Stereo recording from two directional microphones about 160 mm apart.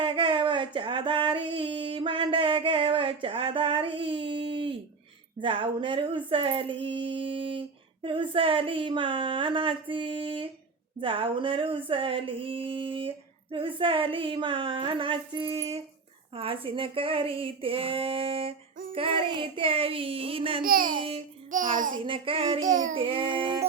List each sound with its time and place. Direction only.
0.0 s a sound: 30° right (ahead or behind)
5.4 s female singing: 30° right (ahead or behind)
20.6 s speech: 65° right (ahead or behind)
22.0 s female singing: 35° right (ahead or behind)
22.7 s speech: 55° right (ahead or behind)
23.0 s female singing: 35° right (ahead or behind)